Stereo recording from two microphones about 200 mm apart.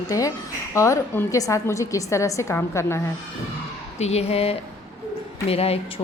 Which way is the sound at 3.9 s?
30° left (ahead or behind).